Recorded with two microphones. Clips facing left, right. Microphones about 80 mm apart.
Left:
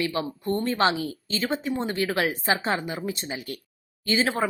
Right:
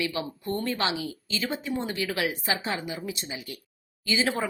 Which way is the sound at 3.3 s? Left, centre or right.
Left.